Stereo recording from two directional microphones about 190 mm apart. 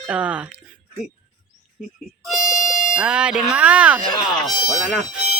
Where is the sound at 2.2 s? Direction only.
Centre (ahead or behind).